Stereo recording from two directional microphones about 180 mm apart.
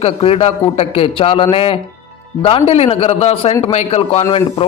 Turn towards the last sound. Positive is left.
turn(degrees=35)  # may be behind; listen again after turning